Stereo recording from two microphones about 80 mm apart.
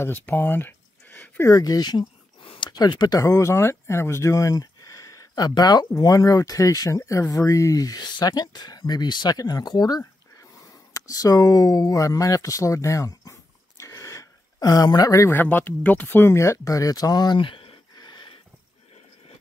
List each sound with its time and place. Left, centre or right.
0.0 s speech: left
1.5 s speech: left
2.5 s a sound: left
2.8 s speech: left
3.2 s speech: left
10.9 s speech: left
15.4 s speech: left